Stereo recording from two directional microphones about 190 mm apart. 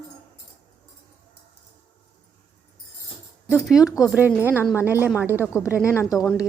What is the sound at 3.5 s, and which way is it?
A woman's voice, centre (ahead or behind).